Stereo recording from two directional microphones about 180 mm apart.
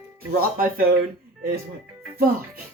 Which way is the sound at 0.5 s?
50° right (ahead or behind).